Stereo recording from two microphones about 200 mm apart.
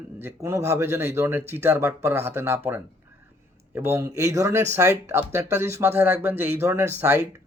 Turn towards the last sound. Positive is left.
turn(degrees=-10)  # may be behind; listen again after turning